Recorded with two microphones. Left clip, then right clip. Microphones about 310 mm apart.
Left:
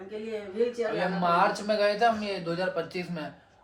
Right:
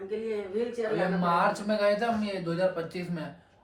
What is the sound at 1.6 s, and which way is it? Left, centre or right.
Speech, centre.